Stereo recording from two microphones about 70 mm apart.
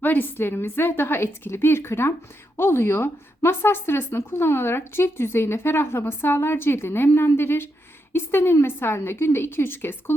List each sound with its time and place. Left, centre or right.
0.0 s speech: left